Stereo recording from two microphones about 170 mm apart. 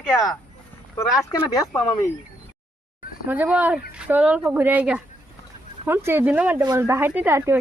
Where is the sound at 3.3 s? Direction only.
10° right (ahead or behind).